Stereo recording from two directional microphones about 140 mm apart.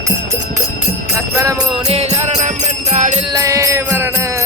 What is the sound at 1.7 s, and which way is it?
Music, 45° right (ahead or behind).